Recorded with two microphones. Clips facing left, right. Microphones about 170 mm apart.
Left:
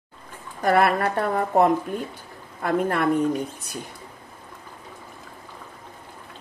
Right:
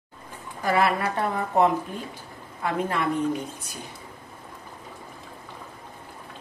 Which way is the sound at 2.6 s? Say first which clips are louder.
Left 4 dB; 50° left (ahead or behind).